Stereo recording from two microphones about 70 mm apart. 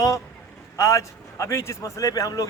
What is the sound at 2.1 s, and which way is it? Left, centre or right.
Speech, left.